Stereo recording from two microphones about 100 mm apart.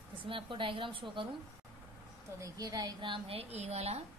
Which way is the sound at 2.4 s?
40° right (ahead or behind).